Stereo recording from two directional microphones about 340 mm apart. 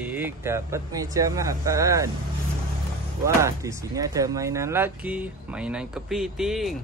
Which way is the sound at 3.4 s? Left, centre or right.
Centre.